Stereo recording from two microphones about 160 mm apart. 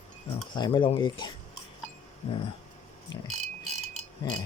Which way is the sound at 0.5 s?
30° left (ahead or behind).